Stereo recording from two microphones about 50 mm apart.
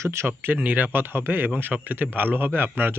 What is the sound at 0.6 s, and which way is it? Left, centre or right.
Speech, right.